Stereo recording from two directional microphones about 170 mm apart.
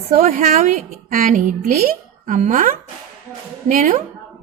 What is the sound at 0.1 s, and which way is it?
A woman's voice, 50° right (ahead or behind).